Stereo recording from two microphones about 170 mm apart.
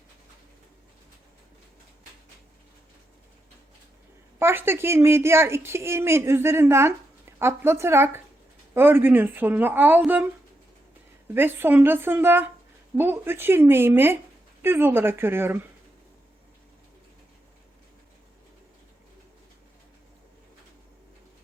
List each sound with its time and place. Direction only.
4.4 s a woman's voice: 15° right (ahead or behind)
11.3 s a woman's voice: 10° right (ahead or behind)